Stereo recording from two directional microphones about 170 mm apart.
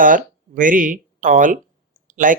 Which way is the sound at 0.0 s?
50° right (ahead or behind).